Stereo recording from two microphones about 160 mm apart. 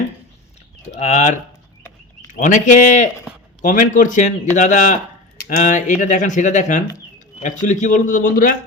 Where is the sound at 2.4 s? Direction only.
50° left (ahead or behind).